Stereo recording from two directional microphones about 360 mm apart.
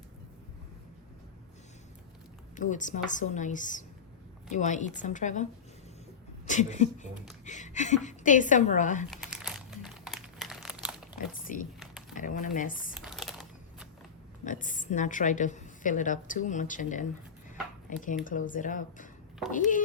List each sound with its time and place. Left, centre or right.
2.6 s a woman's voice: left
6.5 s a woman's voice: centre
9.0 s crumpling: centre
11.5 s a woman's voice: left
12.9 s a sound: centre
14.4 s a woman's voice: left